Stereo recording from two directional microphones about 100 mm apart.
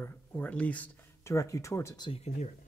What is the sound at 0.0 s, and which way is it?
Speech, 15° left (ahead or behind).